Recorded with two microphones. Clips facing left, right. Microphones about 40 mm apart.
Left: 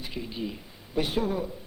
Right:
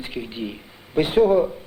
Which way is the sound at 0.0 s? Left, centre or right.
Right.